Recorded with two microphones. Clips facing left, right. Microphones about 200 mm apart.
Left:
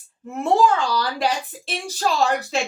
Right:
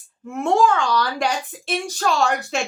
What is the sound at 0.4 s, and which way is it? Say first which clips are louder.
A woman's voice: even; 35° left (ahead or behind).